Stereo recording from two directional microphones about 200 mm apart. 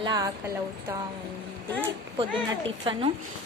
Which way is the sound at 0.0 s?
20° right (ahead or behind).